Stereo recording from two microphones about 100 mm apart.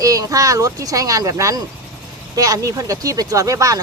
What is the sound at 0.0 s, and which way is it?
Speech, 35° right (ahead or behind).